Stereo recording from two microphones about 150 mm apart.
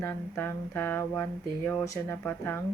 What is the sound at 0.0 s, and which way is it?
Speech, 15° left (ahead or behind).